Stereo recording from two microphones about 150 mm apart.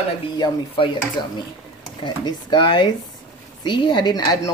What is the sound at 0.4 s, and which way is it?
Speech, 35° left (ahead or behind).